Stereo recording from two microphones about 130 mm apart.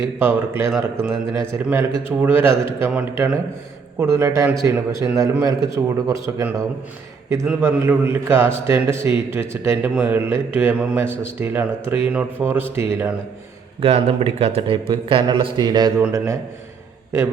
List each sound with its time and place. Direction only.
0.0 s a man's voice: 15° right (ahead or behind)
4.0 s a man's voice: 20° right (ahead or behind)
7.6 s a man's voice: 15° right (ahead or behind)
13.8 s a man's voice: 50° right (ahead or behind); by 15.9 s 35° right (ahead or behind)
16.0 s a man's voice: 20° right (ahead or behind)